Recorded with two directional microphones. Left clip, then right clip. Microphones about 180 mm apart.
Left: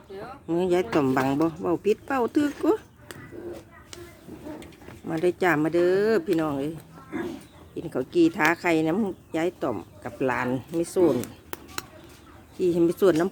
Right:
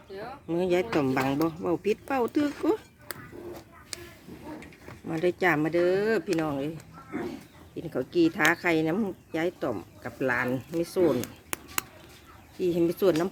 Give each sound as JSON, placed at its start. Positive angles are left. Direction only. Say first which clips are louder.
{"t": 0.4, "sound": "speech", "louder": "left 2 dB", "side_deg": 5}
{"t": 5.0, "sound": "speech", "louder": "left 2 dB", "side_deg": 0}
{"t": 7.8, "sound": "speech", "louder": "left 3 dB", "side_deg": 0}
{"t": 11.5, "sound": "a sound", "louder": "right 3 dB", "side_deg": -25}
{"t": 12.5, "sound": "speech", "louder": "left 4 dB", "side_deg": 10}